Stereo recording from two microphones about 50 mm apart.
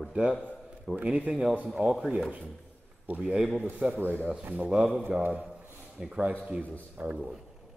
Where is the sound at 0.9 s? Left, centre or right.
Right.